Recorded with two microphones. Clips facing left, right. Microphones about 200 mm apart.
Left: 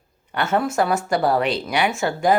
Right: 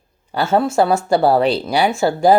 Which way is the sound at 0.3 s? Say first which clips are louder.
Right 5 dB; 30° right (ahead or behind).